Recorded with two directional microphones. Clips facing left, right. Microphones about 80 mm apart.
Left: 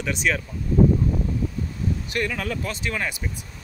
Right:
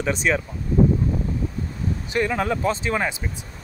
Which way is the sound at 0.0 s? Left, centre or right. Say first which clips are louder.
Right 3 dB; right.